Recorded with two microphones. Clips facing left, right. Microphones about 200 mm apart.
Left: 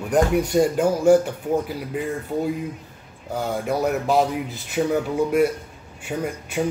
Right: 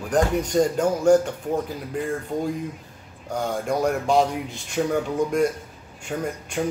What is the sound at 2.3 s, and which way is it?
Speech, 5° left (ahead or behind).